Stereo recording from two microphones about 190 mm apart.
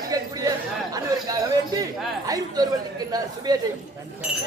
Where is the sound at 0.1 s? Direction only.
20° right (ahead or behind).